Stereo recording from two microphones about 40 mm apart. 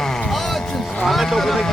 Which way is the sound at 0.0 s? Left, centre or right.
Centre.